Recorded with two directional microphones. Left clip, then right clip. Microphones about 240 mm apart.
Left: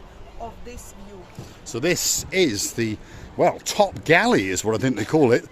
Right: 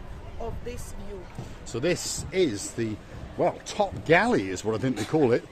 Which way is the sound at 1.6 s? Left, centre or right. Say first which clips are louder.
Left 5 dB; left.